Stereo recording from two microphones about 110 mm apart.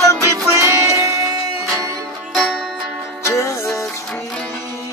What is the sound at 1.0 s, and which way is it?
Music, 30° right (ahead or behind).